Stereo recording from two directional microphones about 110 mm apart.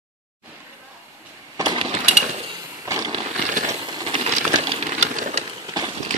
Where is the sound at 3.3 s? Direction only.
90° right.